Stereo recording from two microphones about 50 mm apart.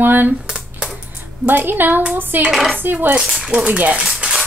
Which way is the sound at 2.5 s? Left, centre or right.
Centre.